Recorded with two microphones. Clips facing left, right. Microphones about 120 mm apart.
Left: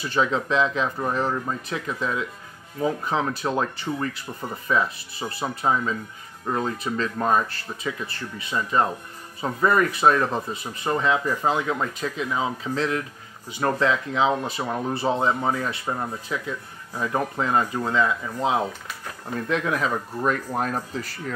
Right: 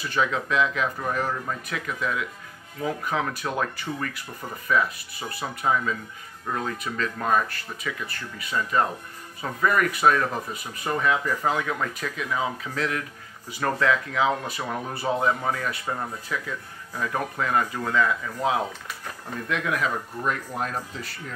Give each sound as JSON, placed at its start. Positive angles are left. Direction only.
{"t": 0.1, "sound": "speech", "side_deg": 30}